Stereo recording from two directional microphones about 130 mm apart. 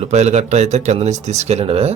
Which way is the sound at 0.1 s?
60° right (ahead or behind).